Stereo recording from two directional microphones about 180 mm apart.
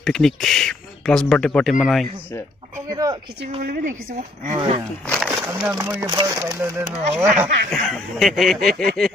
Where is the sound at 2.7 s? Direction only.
20° right (ahead or behind).